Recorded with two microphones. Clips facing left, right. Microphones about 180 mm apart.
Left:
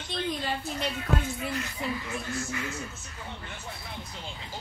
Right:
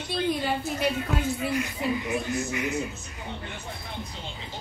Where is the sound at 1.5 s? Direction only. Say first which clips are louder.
Right 5 dB; 15° right (ahead or behind).